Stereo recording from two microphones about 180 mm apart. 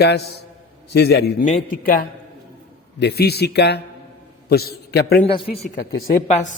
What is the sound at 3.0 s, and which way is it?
A man's voice, 65° left (ahead or behind).